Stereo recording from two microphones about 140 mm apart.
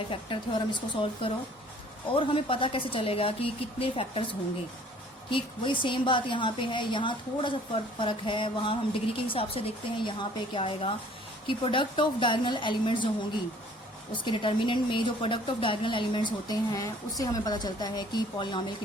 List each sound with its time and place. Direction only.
0.1 s a woman's voice: 35° left (ahead or behind)
14.2 s a woman's voice: 35° left (ahead or behind)
16.5 s speech: 25° left (ahead or behind)